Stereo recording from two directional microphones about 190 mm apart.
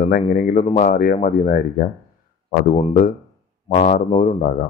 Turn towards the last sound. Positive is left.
turn(degrees=40)  # may be behind; listen again after turning